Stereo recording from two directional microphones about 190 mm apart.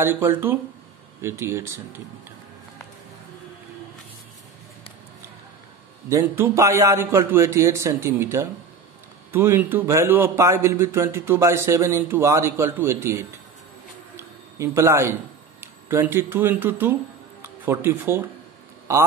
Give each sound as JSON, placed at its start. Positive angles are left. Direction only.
{"t": 0.0, "sound": "a man's voice", "side_deg": -10}
{"t": 6.0, "sound": "a man's voice", "side_deg": -15}
{"t": 14.6, "sound": "a man's voice", "side_deg": -15}